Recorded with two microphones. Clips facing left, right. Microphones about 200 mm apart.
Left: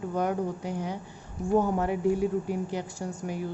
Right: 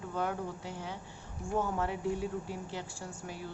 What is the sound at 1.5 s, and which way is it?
Speech, 40° left (ahead or behind).